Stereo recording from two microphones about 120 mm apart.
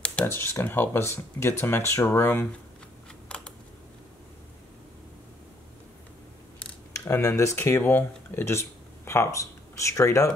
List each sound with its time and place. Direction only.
0.0 s a sound: 10° left (ahead or behind)
0.3 s speech: 20° left (ahead or behind)
3.3 s typing: 10° left (ahead or behind)
6.9 s speech: 25° left (ahead or behind)